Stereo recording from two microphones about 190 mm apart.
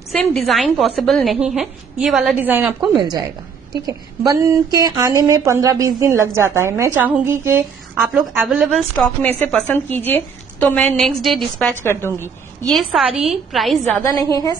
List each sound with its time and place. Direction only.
0.1 s a woman's voice: 5° left (ahead or behind)
3.7 s speech: 20° right (ahead or behind)
8.4 s a woman's voice: centre (ahead or behind)
11.8 s a woman's voice: 10° left (ahead or behind)
12.6 s a woman's voice: centre (ahead or behind)